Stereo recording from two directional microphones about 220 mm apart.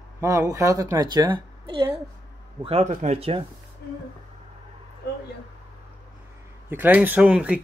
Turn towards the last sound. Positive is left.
turn(degrees=-5)  # may be behind; listen again after turning